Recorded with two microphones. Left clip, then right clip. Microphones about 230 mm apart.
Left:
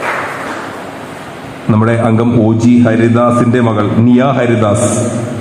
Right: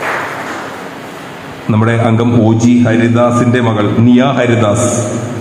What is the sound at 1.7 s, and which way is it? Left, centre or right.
A man's voice, left.